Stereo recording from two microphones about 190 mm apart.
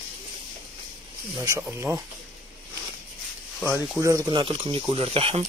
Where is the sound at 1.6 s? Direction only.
10° right (ahead or behind).